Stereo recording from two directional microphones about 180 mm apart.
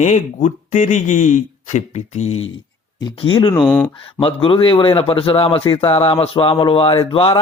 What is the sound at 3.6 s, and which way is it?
Speech, 5° left (ahead or behind).